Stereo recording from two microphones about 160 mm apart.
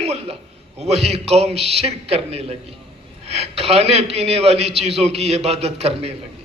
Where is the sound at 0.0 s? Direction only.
40° right (ahead or behind).